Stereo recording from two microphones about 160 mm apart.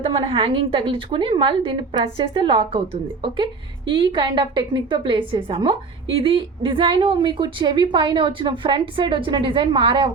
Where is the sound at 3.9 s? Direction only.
30° right (ahead or behind).